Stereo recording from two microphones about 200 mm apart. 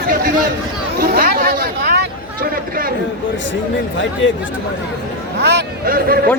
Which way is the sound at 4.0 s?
70° left (ahead or behind).